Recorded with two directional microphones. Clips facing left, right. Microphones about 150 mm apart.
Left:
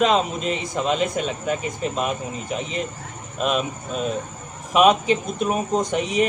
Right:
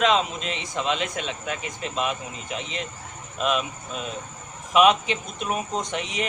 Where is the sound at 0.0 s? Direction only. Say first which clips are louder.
Left 3 dB; 45° left (ahead or behind).